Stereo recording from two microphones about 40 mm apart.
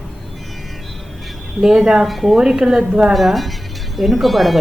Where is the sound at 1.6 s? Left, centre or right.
Centre.